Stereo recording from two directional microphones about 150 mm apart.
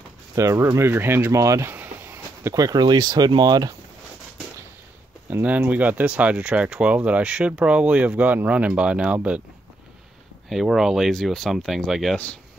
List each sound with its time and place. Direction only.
0.4 s speech: 20° right (ahead or behind)
5.3 s speech: 10° right (ahead or behind)
10.5 s speech: centre (ahead or behind)